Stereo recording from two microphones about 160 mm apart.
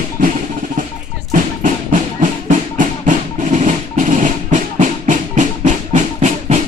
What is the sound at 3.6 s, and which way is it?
Drum, 55° right (ahead or behind).